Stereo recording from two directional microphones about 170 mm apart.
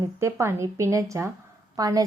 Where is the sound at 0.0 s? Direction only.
15° right (ahead or behind).